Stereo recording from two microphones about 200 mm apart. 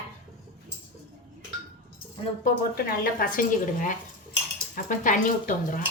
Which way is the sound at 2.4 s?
50° left (ahead or behind).